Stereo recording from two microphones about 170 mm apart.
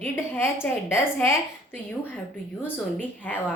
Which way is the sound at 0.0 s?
15° left (ahead or behind).